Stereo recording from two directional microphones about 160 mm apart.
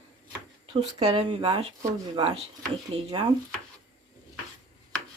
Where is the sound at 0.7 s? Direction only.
40° right (ahead or behind).